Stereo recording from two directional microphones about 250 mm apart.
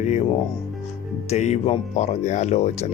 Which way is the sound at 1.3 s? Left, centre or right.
Left.